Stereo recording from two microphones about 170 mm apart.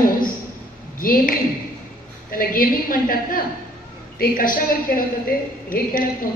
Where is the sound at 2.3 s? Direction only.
55° left (ahead or behind).